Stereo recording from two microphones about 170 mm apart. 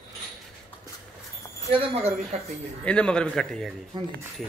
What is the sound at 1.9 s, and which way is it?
Speech, 40° right (ahead or behind).